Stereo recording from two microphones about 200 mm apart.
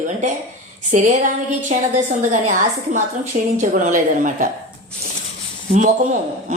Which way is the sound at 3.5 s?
40° right (ahead or behind).